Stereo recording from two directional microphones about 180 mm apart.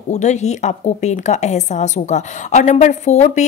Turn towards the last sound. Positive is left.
turn(degrees=40)  # may be behind; listen again after turning